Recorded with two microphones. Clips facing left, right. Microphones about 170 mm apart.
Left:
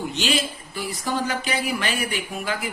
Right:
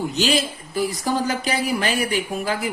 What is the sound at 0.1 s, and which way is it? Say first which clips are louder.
Speech: right 4 dB; 40° right (ahead or behind).